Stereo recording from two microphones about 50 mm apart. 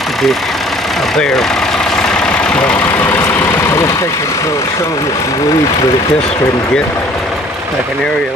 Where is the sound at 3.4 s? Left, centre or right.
Left.